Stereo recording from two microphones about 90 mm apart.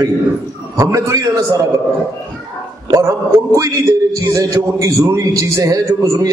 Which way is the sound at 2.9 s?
35° right (ahead or behind).